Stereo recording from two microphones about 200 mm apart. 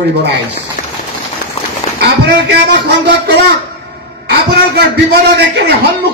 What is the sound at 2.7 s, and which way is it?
Speech, 60° right (ahead or behind).